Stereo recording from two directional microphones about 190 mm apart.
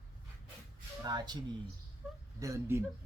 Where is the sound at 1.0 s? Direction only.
20° right (ahead or behind).